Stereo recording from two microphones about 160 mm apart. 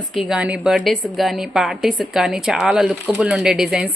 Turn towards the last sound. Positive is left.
turn(degrees=0)  # may be behind; listen again after turning